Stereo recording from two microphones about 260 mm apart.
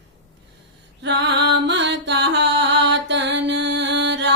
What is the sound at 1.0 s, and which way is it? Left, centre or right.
Music, right.